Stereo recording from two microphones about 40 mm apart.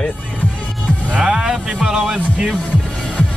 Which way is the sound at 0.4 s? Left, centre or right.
Left.